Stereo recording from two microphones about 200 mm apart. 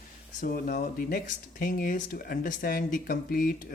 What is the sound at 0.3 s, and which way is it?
Speech, 45° left (ahead or behind).